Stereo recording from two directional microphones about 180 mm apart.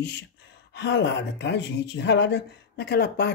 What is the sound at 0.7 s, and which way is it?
Speech, 80° left.